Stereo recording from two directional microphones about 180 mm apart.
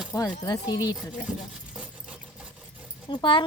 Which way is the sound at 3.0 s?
25° left (ahead or behind).